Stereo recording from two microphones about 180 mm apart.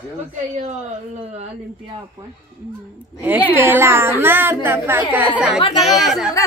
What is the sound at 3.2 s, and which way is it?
A woman's voice, 10° right (ahead or behind).